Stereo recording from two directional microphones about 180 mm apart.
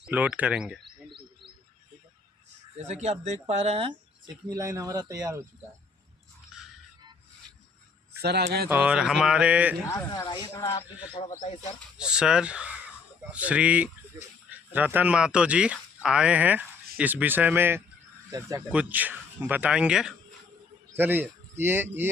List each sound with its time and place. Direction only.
0.0 s speech: 5° right (ahead or behind)
2.7 s speech: 40° right (ahead or behind)
4.4 s speech: 20° right (ahead or behind)
8.2 s speech: 65° right (ahead or behind)
8.7 s speech: 5° right (ahead or behind)
9.8 s speech: 15° left (ahead or behind)
11.3 s speech: 35° left (ahead or behind)
11.9 s speech: 5° right (ahead or behind)
18.7 s a man's voice: 10° right (ahead or behind)